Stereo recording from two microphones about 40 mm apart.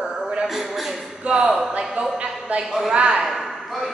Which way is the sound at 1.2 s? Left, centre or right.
Right.